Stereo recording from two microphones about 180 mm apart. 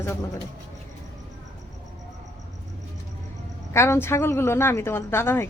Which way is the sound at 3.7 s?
15° left (ahead or behind).